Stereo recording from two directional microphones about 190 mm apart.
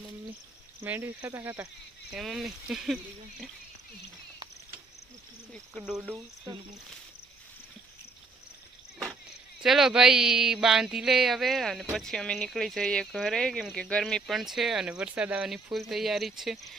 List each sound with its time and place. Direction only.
0.8 s cricket: 10° right (ahead or behind)
2.1 s speech: centre (ahead or behind)
5.7 s speech: 5° right (ahead or behind)
6.5 s speech: 20° right (ahead or behind)
9.6 s speech: centre (ahead or behind)